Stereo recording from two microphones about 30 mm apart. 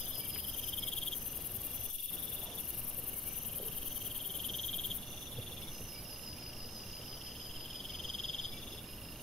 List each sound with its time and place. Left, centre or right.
4.5 s cricket: centre
7.9 s frog: centre